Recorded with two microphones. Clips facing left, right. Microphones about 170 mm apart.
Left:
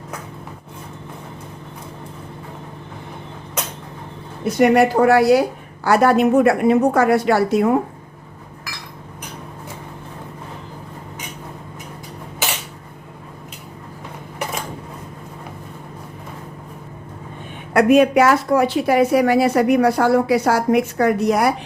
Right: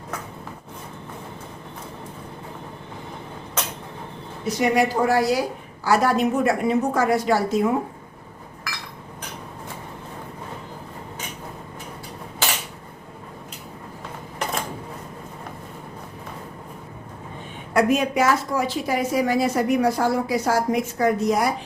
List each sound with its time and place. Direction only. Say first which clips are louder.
4.4 s a woman's voice: left 6 dB; 60° left (ahead or behind)
17.7 s a woman's voice: left 7 dB; 65° left (ahead or behind)